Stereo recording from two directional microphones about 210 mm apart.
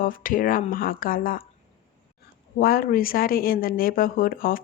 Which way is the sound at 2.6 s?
45° left (ahead or behind).